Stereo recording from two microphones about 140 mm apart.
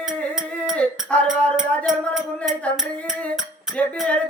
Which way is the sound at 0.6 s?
5° left (ahead or behind).